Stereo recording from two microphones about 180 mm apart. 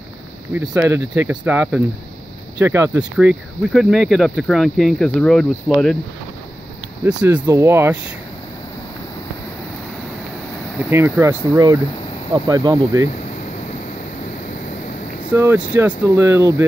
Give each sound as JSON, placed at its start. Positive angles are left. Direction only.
{"t": 0.6, "sound": "speech", "side_deg": -15}
{"t": 7.1, "sound": "speech", "side_deg": -10}
{"t": 10.9, "sound": "speech", "side_deg": -15}
{"t": 15.3, "sound": "speech", "side_deg": -10}